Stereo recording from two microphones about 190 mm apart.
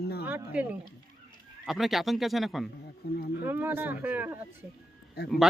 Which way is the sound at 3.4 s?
10° right (ahead or behind).